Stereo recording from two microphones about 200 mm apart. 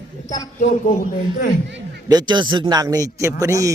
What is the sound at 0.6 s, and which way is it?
Speech, 40° left (ahead or behind).